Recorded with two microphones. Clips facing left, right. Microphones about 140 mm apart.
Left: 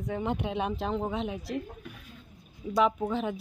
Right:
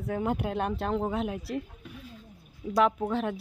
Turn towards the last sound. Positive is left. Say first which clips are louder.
# right 1 dB
turn(degrees=0)  # may be behind; listen again after turning